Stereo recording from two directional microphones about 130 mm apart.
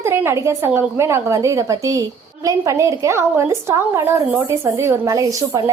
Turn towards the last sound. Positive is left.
turn(degrees=-25)  # may be behind; listen again after turning